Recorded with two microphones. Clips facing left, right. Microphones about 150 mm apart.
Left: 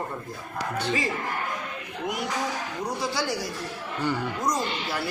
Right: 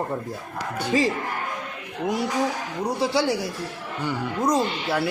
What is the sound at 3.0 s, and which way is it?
Speech, 30° right (ahead or behind).